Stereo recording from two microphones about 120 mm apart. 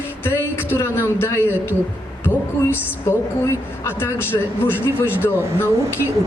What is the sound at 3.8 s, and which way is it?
Speech, 15° left (ahead or behind).